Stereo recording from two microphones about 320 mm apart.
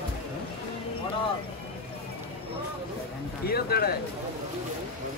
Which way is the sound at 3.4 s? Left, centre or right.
Left.